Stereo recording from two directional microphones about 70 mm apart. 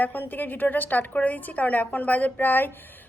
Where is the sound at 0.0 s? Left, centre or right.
Left.